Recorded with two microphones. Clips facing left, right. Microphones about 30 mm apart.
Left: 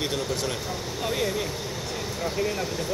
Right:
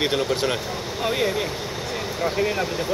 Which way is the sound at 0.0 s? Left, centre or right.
Right.